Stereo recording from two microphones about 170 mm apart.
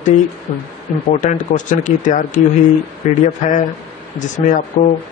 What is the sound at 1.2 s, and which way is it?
Speech, 45° left (ahead or behind).